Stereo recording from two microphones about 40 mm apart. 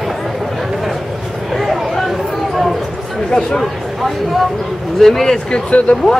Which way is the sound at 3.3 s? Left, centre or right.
Centre.